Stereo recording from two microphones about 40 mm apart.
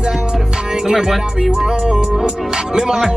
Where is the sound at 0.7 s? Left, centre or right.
Centre.